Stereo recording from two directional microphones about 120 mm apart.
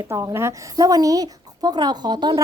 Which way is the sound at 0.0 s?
20° right (ahead or behind).